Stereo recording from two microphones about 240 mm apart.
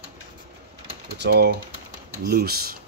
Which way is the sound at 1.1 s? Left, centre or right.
Right.